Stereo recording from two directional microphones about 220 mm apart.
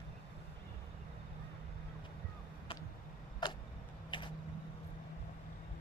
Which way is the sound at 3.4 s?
20° left (ahead or behind).